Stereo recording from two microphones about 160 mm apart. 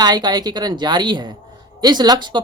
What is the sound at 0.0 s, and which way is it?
Speech, 25° right (ahead or behind).